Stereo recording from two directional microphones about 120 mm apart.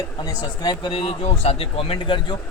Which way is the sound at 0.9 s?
55° left (ahead or behind).